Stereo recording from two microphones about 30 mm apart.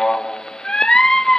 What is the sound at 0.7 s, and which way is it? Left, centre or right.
Music, centre.